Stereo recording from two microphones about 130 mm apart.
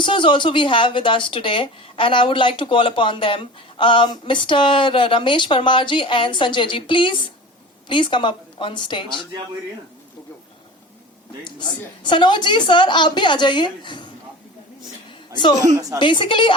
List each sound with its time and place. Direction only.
0.0 s a woman's voice: 40° left (ahead or behind)
12.0 s a woman's voice: 35° left (ahead or behind)
15.3 s speech: 35° left (ahead or behind)
15.6 s a woman's voice: 25° right (ahead or behind)
16.0 s a woman's voice: 40° left (ahead or behind)